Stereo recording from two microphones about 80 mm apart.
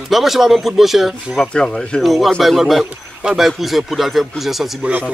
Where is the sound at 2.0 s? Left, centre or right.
Centre.